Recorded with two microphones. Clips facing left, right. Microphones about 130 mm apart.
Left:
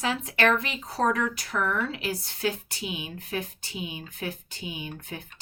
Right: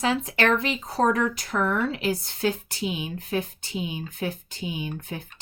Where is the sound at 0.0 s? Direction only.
25° right (ahead or behind).